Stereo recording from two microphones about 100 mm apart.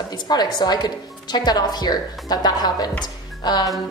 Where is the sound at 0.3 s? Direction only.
45° left (ahead or behind).